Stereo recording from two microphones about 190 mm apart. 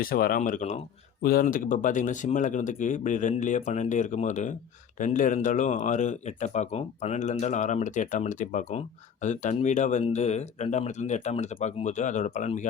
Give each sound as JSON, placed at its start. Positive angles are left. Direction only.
{"t": 0.0, "sound": "speech", "side_deg": 50}